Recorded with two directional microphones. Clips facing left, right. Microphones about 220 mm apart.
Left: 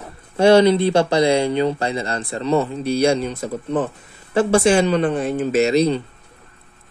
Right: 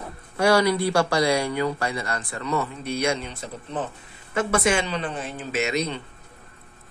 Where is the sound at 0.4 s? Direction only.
25° left (ahead or behind); by 3.8 s 45° left (ahead or behind).